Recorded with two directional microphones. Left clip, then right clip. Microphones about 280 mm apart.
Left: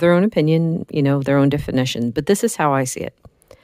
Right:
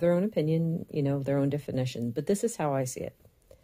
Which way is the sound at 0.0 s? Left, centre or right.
Left.